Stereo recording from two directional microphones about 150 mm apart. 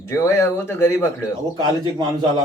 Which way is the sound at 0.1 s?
20° left (ahead or behind).